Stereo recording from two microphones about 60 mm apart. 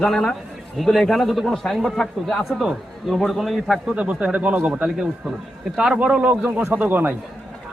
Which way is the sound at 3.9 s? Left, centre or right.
Right.